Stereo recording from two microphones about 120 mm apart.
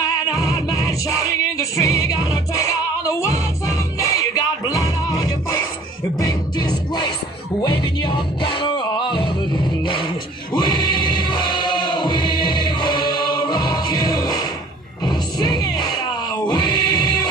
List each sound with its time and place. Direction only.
0.3 s music: 30° left (ahead or behind)
10.5 s music: 35° left (ahead or behind)